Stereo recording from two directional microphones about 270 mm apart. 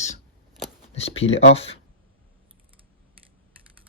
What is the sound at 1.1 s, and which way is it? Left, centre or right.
Speech, left.